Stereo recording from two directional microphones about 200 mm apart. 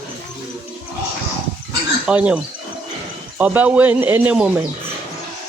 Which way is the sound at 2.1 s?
5° right (ahead or behind).